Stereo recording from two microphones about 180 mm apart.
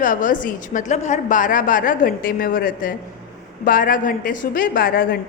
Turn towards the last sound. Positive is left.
turn(degrees=50)  # may be behind; listen again after turning